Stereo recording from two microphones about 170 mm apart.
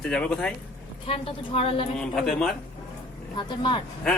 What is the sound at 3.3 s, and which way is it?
Speech, 30° left (ahead or behind).